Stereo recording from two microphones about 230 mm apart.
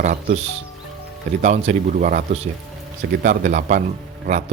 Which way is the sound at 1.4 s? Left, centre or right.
Right.